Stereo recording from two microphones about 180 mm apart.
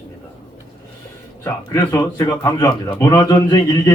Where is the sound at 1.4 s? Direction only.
15° left (ahead or behind).